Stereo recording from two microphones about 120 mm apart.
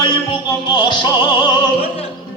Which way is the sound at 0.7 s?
40° left (ahead or behind).